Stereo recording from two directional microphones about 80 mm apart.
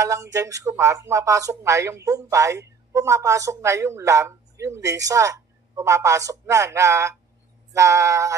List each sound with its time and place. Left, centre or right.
0.0 s speech: right